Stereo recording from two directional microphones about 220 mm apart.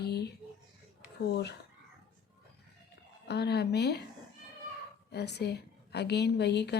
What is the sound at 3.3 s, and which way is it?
Speech, 50° left (ahead or behind).